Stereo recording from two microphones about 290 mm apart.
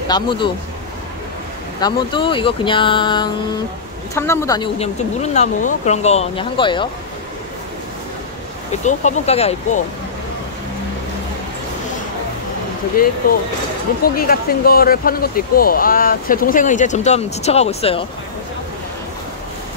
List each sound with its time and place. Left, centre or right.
0.1 s speech: centre
1.8 s speech: centre
8.8 s speech: left
13.0 s speech: left